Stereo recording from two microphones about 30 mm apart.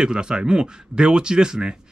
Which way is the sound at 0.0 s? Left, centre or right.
Right.